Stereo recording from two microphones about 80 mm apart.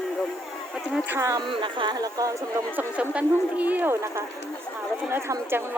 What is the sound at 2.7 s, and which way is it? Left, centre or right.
Speech, centre.